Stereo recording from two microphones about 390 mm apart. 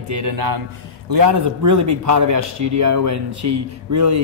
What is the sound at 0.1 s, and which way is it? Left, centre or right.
A man's voice, right.